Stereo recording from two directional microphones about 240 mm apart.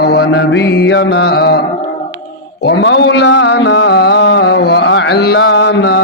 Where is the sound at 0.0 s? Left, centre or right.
Left.